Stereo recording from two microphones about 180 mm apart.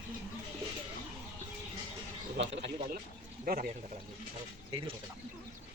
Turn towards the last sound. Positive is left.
turn(degrees=-30)  # may be behind; listen again after turning